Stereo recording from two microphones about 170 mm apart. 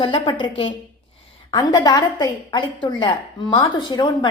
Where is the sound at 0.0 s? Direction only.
30° left (ahead or behind).